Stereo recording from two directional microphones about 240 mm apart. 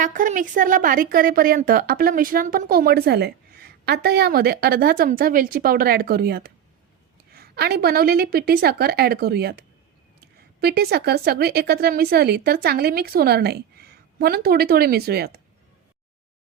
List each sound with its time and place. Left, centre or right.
0.0 s a woman's voice: right